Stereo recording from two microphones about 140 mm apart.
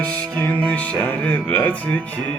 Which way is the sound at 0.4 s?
10° left (ahead or behind).